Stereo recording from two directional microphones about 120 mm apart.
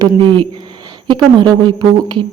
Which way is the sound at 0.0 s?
40° right (ahead or behind).